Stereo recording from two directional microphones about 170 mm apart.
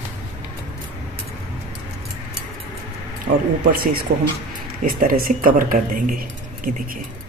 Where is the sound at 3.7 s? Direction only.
60° right (ahead or behind).